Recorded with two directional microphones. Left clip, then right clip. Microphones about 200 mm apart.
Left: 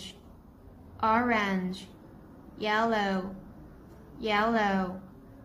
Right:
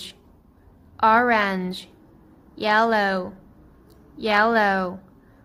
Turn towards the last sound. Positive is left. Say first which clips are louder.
# right 8 dB
turn(degrees=-55)  # may be behind; listen again after turning